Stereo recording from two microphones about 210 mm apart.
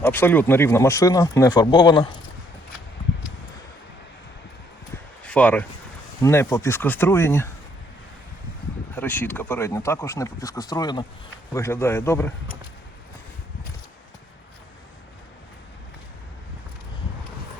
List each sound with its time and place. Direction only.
0.0 s speech: 10° left (ahead or behind)
5.2 s a sound: 5° left (ahead or behind)
6.2 s speech: 15° left (ahead or behind)
9.0 s speech: 10° left (ahead or behind)